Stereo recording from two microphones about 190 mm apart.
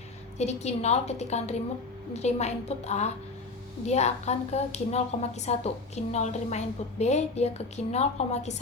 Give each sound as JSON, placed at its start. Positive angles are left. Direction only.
{"t": 0.3, "sound": "a woman's voice", "side_deg": 35}